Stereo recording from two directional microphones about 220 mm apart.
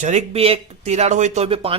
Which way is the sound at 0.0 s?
30° right (ahead or behind).